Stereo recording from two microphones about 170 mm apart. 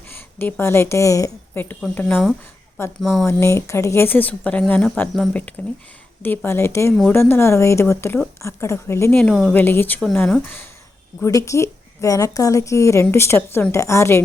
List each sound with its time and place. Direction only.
0.1 s a woman's voice: 10° left (ahead or behind)
3.0 s speech: centre (ahead or behind)
3.2 s a woman's voice: 15° left (ahead or behind)
11.2 s a woman's voice: 20° left (ahead or behind)